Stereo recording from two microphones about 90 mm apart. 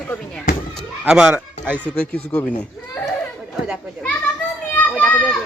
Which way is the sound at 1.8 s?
15° left (ahead or behind).